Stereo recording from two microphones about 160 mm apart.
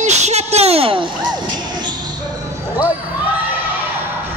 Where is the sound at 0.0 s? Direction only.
45° right (ahead or behind).